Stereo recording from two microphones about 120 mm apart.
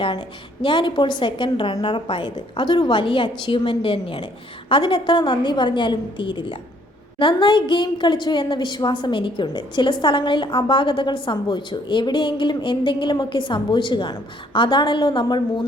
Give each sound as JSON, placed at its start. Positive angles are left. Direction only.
{"t": 0.0, "sound": "a woman's voice", "side_deg": 45}